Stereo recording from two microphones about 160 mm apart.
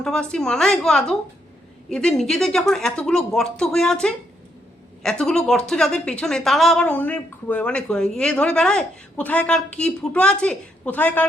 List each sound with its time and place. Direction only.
0.0 s a woman's voice: 5° left (ahead or behind)